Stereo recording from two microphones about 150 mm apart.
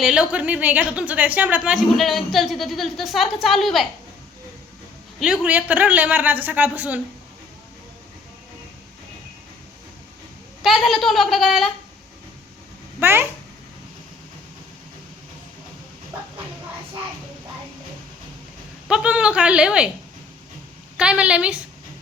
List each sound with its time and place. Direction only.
0.0 s a woman's voice: 5° right (ahead or behind)
5.2 s a man's voice: 5° right (ahead or behind)
10.6 s a woman's voice: centre (ahead or behind)
13.0 s a man's voice: 15° right (ahead or behind)
18.9 s a man's voice: 5° right (ahead or behind)
20.9 s a man's voice: 5° right (ahead or behind)